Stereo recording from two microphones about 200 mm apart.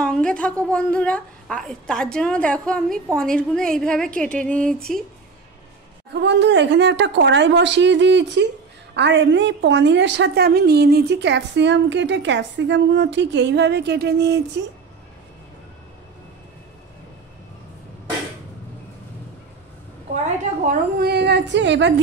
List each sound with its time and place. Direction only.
0.0 s a woman's voice: 5° left (ahead or behind)
6.2 s a woman's voice: 60° right (ahead or behind)
20.6 s a woman's voice: 45° right (ahead or behind); by 21.9 s 65° right (ahead or behind)